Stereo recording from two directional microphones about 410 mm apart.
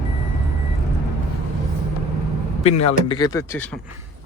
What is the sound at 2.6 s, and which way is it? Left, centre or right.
Speech, centre.